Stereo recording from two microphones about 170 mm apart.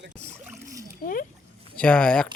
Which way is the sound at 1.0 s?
55° left (ahead or behind).